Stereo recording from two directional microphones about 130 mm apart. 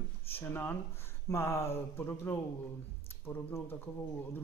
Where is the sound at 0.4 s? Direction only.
15° left (ahead or behind).